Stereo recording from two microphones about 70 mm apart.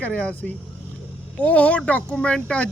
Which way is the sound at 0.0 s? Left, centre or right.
Left.